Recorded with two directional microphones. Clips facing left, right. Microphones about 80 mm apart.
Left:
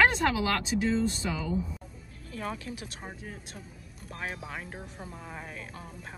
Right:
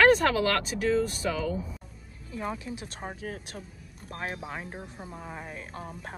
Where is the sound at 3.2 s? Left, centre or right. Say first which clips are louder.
Right 5 dB; right.